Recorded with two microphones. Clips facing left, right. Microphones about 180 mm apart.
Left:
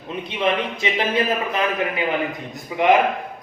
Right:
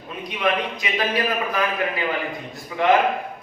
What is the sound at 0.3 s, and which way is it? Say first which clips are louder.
A man's voice: left 1 dB; 25° left (ahead or behind).